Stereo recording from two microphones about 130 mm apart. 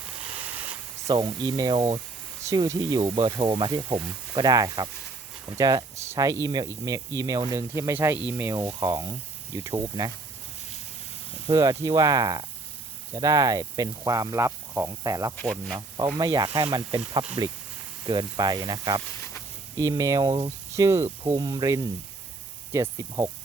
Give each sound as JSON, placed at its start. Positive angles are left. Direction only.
{"t": 1.0, "sound": "speech", "side_deg": -30}
{"t": 1.7, "sound": "speech", "side_deg": -40}
{"t": 2.5, "sound": "speech", "side_deg": -25}
{"t": 11.5, "sound": "speech", "side_deg": -25}
{"t": 15.4, "sound": "speech", "side_deg": 5}
{"t": 16.1, "sound": "speech", "side_deg": -30}